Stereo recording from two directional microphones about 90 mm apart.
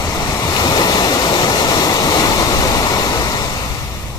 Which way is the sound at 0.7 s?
50° left (ahead or behind).